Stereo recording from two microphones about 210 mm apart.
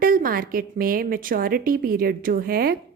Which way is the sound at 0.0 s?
40° right (ahead or behind).